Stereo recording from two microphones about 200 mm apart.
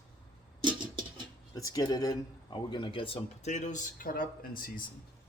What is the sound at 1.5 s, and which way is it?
Speech, 20° left (ahead or behind).